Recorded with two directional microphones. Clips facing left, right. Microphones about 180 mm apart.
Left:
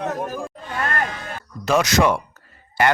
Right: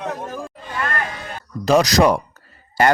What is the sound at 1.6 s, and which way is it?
Speech, 35° right (ahead or behind).